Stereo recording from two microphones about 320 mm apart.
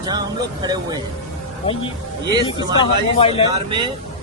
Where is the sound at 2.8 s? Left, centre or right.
Centre.